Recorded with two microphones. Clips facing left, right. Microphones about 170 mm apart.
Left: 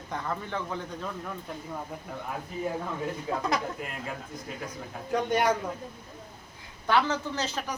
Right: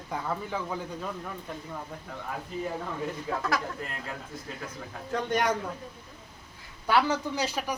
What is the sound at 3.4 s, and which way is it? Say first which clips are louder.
Speech: left 1 dB; 20° left (ahead or behind).